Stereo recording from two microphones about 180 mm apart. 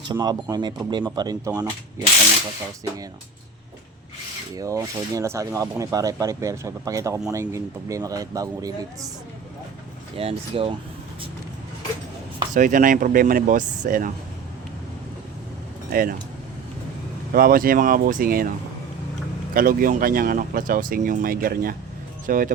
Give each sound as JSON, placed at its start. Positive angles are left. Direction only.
{"t": 0.1, "sound": "speech", "side_deg": -20}
{"t": 4.5, "sound": "speech", "side_deg": -20}
{"t": 10.2, "sound": "speech", "side_deg": -30}
{"t": 12.5, "sound": "speech", "side_deg": -45}
{"t": 15.9, "sound": "speech", "side_deg": -55}
{"t": 17.3, "sound": "speech", "side_deg": -55}
{"t": 19.5, "sound": "speech", "side_deg": -50}